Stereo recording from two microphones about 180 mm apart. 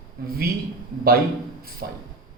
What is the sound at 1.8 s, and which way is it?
Speech, 55° right (ahead or behind).